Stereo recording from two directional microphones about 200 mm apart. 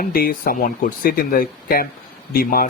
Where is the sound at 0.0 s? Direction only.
45° left (ahead or behind).